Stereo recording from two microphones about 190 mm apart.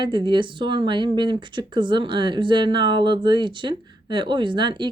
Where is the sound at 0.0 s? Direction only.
25° right (ahead or behind).